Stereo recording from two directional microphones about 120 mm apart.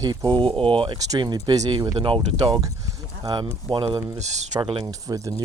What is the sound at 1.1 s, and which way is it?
Speech, 35° right (ahead or behind).